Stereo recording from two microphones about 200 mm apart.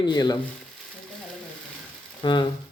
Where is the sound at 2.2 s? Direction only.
25° left (ahead or behind).